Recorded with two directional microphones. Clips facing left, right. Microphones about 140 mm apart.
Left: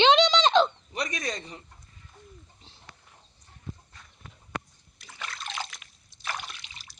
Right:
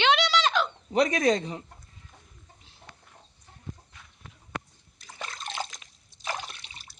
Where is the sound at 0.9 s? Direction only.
90° right.